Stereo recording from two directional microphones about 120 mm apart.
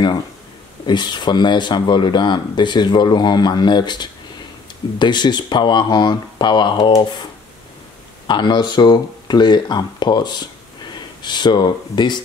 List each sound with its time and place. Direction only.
0.8 s speech: 40° left (ahead or behind)
8.3 s speech: 40° left (ahead or behind)